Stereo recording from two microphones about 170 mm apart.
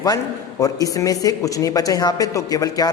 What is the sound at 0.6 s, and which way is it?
Speech, 20° left (ahead or behind).